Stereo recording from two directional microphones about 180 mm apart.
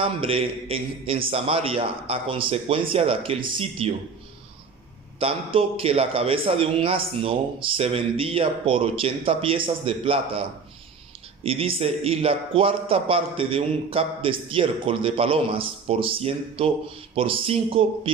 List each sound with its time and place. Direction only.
0.0 s a man's voice: 30° right (ahead or behind)
5.2 s a man's voice: 30° right (ahead or behind)
11.4 s a man's voice: 30° right (ahead or behind)